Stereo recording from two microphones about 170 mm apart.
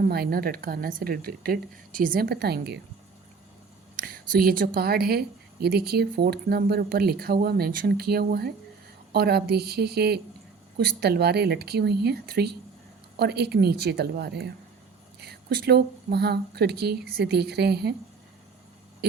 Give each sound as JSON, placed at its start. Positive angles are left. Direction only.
{"t": 0.0, "sound": "a woman's voice", "side_deg": -65}
{"t": 3.9, "sound": "a woman's voice", "side_deg": -55}